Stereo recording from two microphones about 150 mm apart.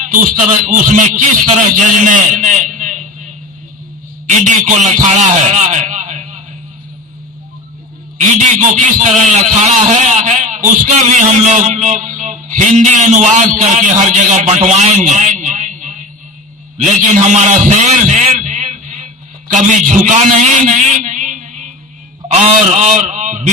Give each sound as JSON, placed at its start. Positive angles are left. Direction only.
{"t": 0.6, "sound": "a man's voice", "side_deg": -60}
{"t": 4.3, "sound": "a man's voice", "side_deg": -55}
{"t": 5.1, "sound": "a sound", "side_deg": -50}
{"t": 8.2, "sound": "a man's voice", "side_deg": -55}